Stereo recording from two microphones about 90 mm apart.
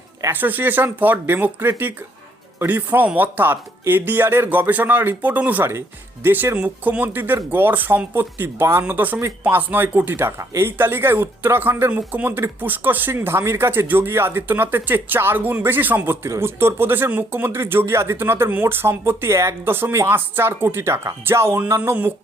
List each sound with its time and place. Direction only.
0.3 s speech: 20° right (ahead or behind)